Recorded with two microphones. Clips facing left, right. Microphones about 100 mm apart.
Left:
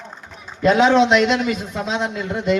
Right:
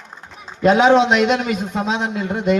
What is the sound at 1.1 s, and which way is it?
A man's voice, 50° right (ahead or behind).